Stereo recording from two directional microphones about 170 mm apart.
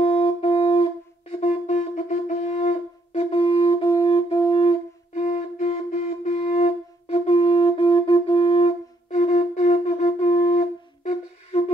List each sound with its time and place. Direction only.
0.0 s wind instrument: 35° left (ahead or behind)